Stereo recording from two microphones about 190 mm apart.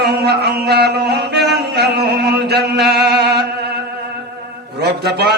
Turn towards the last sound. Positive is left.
turn(degrees=-60)  # may be behind; listen again after turning